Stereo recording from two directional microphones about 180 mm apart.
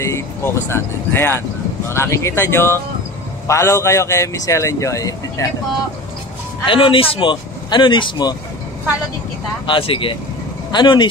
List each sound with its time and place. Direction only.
0.0 s a man's voice: 15° left (ahead or behind)
6.6 s speech: 30° left (ahead or behind)
9.7 s speech: 30° left (ahead or behind)